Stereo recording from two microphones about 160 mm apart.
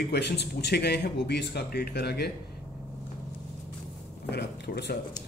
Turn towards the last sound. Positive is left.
turn(degrees=85)